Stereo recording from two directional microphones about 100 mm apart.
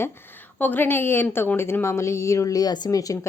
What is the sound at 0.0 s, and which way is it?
A woman's voice, 20° left (ahead or behind).